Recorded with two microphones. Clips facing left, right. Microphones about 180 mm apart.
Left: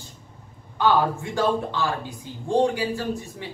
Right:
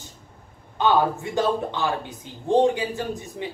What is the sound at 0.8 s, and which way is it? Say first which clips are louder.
A woman's voice: even; 20° right (ahead or behind).